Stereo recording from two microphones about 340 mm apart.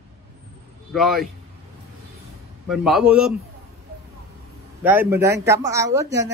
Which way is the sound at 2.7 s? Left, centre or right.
Centre.